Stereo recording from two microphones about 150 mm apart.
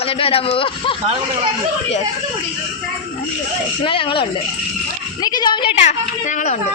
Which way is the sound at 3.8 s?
35° left (ahead or behind).